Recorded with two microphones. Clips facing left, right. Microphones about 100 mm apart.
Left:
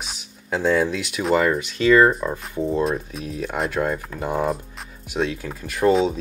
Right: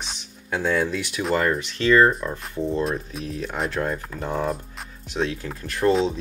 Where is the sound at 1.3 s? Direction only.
10° left (ahead or behind).